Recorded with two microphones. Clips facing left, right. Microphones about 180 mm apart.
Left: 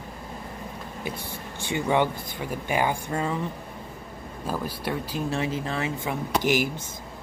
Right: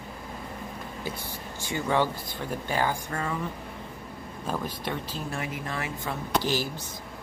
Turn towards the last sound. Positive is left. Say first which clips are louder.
# left 4 dB
turn(degrees=15)  # may be behind; listen again after turning